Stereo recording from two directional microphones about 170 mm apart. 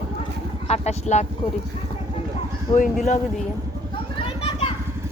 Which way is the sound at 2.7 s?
30° left (ahead or behind).